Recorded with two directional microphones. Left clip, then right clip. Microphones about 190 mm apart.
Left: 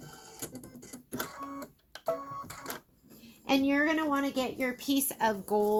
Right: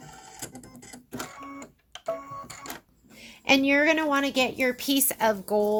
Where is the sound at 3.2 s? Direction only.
40° right (ahead or behind).